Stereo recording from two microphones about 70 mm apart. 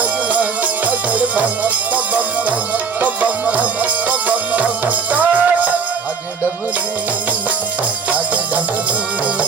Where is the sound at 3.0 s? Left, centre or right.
Right.